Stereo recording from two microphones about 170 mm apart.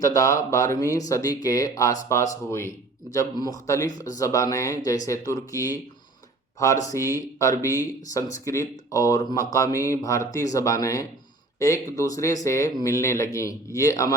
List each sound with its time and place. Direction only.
0.0 s speech: 20° left (ahead or behind)